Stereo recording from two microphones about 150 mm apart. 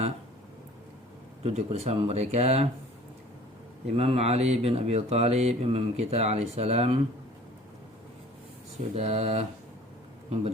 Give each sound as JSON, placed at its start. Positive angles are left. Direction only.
{"t": 1.5, "sound": "speech", "side_deg": -45}
{"t": 3.8, "sound": "speech", "side_deg": -40}
{"t": 9.0, "sound": "speech", "side_deg": -45}